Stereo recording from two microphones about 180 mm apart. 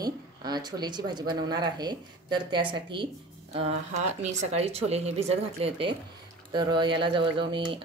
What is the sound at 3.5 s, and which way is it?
Speech, 35° right (ahead or behind).